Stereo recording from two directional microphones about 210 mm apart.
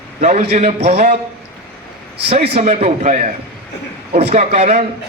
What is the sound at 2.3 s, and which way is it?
A man's voice, 30° right (ahead or behind).